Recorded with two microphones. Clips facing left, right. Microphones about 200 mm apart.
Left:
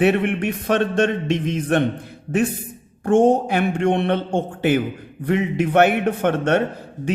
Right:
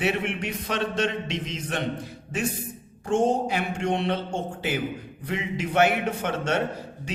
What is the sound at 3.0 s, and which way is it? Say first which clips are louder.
Speech: left 7 dB; 60° left (ahead or behind).